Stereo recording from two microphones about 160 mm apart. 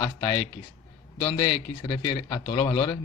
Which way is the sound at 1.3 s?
35° left (ahead or behind).